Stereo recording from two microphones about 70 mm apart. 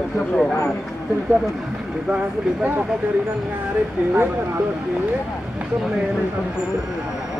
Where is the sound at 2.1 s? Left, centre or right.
Centre.